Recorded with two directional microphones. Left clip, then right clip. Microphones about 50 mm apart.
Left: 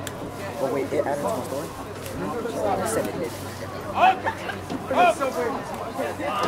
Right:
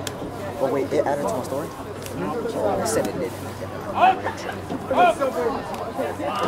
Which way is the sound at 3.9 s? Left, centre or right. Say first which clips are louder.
Right 1 dB; left.